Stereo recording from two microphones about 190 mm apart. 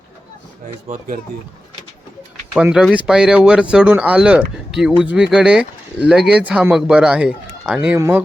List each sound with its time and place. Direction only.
0.9 s speech: 45° right (ahead or behind)
2.6 s speech: 5° right (ahead or behind)
7.9 s speech: 15° right (ahead or behind)